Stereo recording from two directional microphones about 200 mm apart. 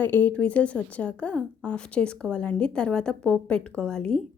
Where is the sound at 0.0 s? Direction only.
10° left (ahead or behind).